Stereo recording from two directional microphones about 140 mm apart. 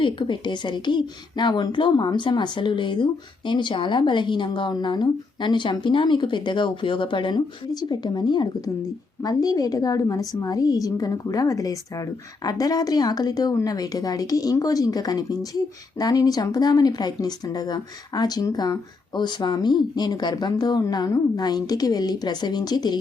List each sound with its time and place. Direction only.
0.0 s a woman's voice: 35° left (ahead or behind)